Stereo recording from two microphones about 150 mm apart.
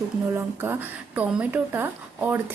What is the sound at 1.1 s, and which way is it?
A woman's voice, 10° right (ahead or behind).